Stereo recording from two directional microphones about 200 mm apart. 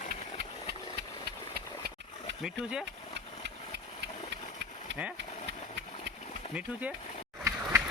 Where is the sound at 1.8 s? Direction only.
50° right (ahead or behind).